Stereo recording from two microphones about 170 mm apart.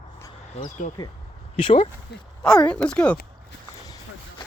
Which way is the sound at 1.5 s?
30° left (ahead or behind).